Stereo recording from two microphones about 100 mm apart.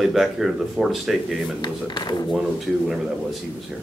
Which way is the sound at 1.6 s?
45° left (ahead or behind).